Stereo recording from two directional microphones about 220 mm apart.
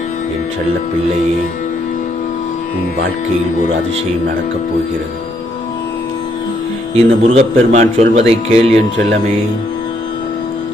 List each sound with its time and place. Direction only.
6.9 s speech: 30° right (ahead or behind)